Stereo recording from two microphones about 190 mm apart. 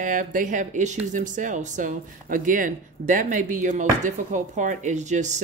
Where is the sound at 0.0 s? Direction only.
45° right (ahead or behind).